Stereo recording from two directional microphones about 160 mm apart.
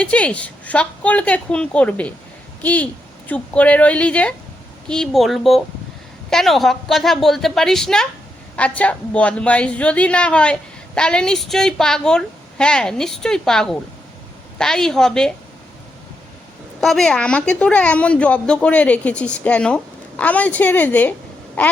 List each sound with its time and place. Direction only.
0.0 s a woman's voice: 5° left (ahead or behind)
16.8 s a woman's voice: 5° left (ahead or behind)